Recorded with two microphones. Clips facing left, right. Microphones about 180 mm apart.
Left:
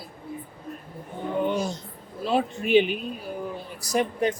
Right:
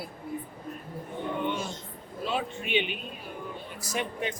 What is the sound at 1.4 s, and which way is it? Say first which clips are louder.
Speech: left 6 dB; 40° left (ahead or behind).